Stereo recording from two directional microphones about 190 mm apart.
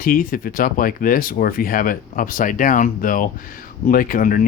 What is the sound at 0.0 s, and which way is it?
Speech, 50° left (ahead or behind).